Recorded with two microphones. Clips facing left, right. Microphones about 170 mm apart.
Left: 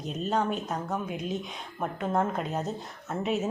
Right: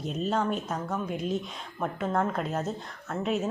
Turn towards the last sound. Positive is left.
turn(degrees=0)  # may be behind; listen again after turning